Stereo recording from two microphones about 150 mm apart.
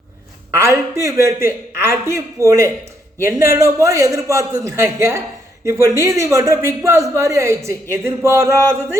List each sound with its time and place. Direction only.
0.5 s a man's voice: 20° right (ahead or behind)